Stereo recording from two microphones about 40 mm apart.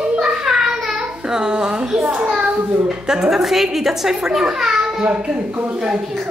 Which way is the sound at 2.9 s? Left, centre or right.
Centre.